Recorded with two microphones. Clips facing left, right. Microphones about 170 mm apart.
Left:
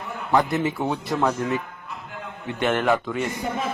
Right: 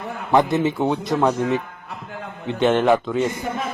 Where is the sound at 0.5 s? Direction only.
20° right (ahead or behind).